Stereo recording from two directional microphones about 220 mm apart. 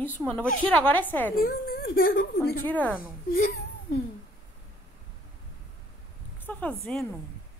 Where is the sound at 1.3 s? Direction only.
40° left (ahead or behind).